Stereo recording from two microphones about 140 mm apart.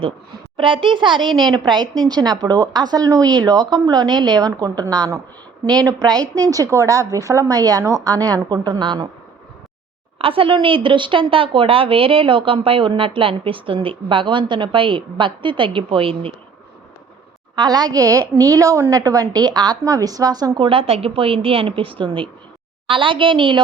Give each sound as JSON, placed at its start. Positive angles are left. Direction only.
{"t": 0.5, "sound": "a woman's voice", "side_deg": -35}
{"t": 10.2, "sound": "a woman's voice", "side_deg": -40}
{"t": 17.5, "sound": "a woman's voice", "side_deg": -30}
{"t": 20.6, "sound": "a woman's voice", "side_deg": -40}